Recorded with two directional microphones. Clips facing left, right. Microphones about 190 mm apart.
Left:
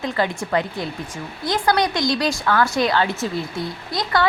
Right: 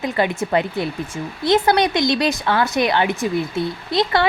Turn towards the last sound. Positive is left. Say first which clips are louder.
# right 4 dB
turn(degrees=-25)  # may be behind; listen again after turning